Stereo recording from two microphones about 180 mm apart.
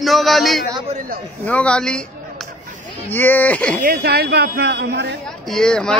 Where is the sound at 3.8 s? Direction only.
60° right (ahead or behind).